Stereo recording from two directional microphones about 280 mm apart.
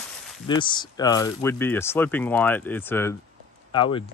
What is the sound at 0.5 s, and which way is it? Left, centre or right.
Speech, centre.